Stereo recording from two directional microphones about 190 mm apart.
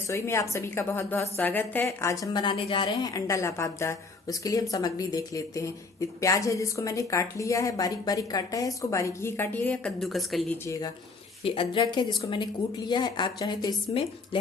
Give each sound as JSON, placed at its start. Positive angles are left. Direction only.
{"t": 0.1, "sound": "a woman's voice", "side_deg": 15}
{"t": 10.7, "sound": "a woman's voice", "side_deg": 20}